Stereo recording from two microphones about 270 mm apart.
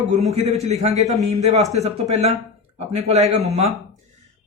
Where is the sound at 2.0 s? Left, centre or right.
Right.